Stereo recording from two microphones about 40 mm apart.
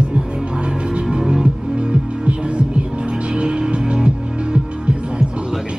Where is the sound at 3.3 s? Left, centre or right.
Right.